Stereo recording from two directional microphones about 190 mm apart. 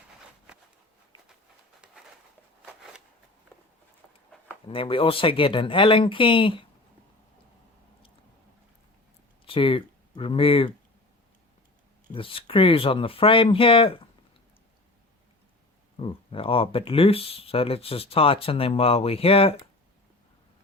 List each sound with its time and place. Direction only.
4.7 s speech: 30° left (ahead or behind)
9.5 s speech: 30° left (ahead or behind)
12.1 s speech: 30° left (ahead or behind)
16.0 s speech: 30° left (ahead or behind)